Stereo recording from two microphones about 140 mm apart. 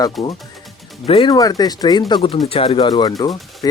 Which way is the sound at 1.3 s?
25° left (ahead or behind).